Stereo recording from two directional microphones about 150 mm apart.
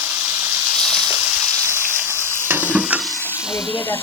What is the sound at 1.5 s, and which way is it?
Frying, 15° right (ahead or behind).